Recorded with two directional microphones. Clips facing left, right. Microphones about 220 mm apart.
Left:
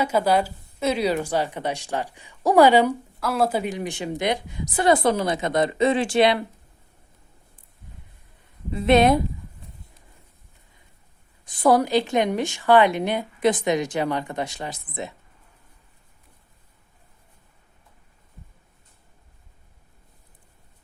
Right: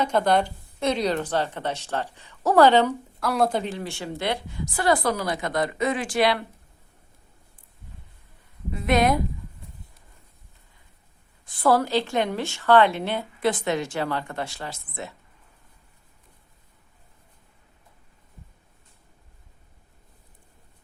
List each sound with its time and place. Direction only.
0.0 s speech: 5° left (ahead or behind); by 6.4 s 25° left (ahead or behind)
8.7 s speech: 25° left (ahead or behind)
11.4 s speech: 15° left (ahead or behind)